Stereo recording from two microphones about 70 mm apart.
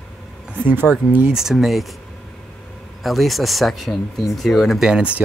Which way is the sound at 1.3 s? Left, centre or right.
Centre.